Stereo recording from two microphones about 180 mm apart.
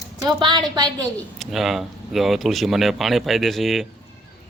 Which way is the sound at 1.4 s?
Centre (ahead or behind).